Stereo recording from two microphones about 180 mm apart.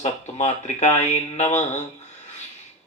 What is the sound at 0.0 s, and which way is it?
Speech, 40° left (ahead or behind).